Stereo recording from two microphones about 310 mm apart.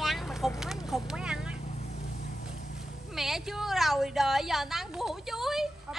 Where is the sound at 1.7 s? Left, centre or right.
Left.